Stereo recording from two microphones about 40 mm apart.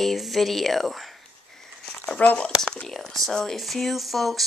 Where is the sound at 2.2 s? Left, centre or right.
Left.